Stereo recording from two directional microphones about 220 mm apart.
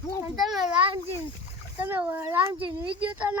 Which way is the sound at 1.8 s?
10° right (ahead or behind).